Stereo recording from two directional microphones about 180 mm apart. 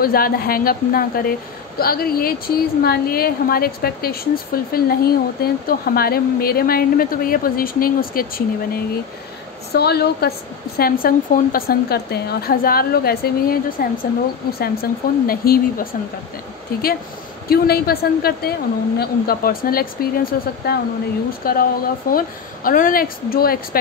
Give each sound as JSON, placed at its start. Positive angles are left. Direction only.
{"t": 0.0, "sound": "a woman's voice", "side_deg": 55}
{"t": 17.5, "sound": "a woman's voice", "side_deg": 60}